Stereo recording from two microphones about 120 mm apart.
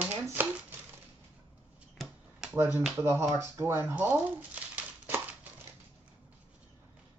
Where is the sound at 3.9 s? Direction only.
15° right (ahead or behind).